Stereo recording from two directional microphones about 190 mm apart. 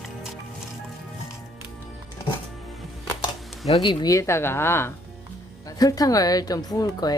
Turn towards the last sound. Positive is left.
turn(degrees=20)  # may be behind; listen again after turning